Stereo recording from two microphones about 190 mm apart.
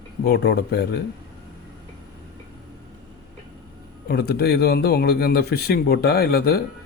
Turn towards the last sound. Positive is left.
turn(degrees=55)  # may be behind; listen again after turning